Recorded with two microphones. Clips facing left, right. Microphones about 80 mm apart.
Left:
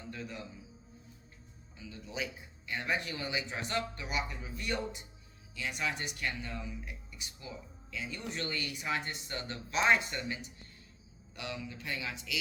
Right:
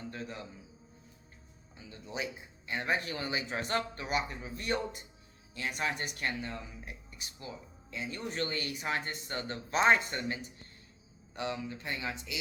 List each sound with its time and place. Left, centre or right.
0.1 s music: right
1.9 s a man's voice: right